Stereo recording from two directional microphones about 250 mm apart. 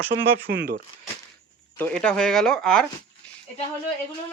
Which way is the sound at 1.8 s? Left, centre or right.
Centre.